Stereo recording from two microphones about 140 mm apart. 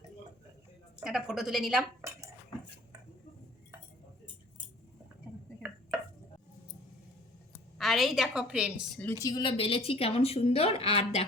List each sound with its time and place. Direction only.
1.0 s a woman's voice: 5° right (ahead or behind)
2.0 s dishes: 20° right (ahead or behind)
7.8 s a woman's voice: centre (ahead or behind)
9.2 s a woman's voice: 30° left (ahead or behind)